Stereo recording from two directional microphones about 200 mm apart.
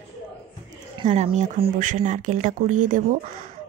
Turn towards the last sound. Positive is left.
turn(degrees=-40)  # may be behind; listen again after turning